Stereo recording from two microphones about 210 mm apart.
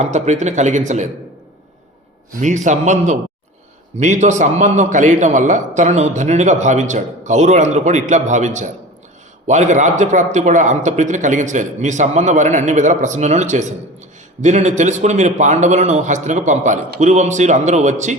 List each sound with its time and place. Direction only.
0.0 s a man's voice: 35° right (ahead or behind)
2.4 s a man's voice: 35° right (ahead or behind)